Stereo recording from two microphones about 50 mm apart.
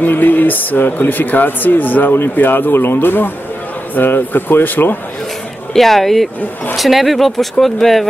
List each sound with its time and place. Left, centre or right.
0.0 s speech: left
5.7 s speech: centre